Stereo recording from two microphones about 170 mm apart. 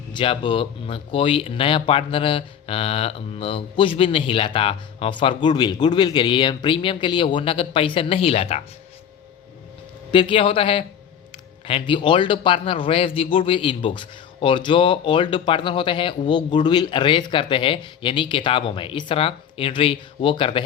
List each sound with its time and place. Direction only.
0.1 s speech: 30° left (ahead or behind)
10.1 s a man's voice: 30° left (ahead or behind)